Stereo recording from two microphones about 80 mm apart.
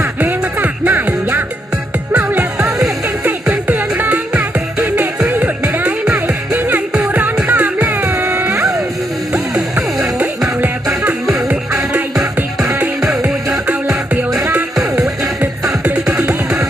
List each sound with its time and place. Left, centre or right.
0.2 s music: right
3.5 s music: right
7.9 s music: right
9.7 s music: centre
14.3 s music: right
14.8 s music: centre
15.8 s music: centre